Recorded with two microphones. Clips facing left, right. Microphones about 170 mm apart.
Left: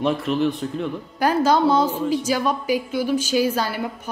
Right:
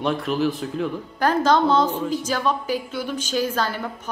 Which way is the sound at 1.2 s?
10° left (ahead or behind).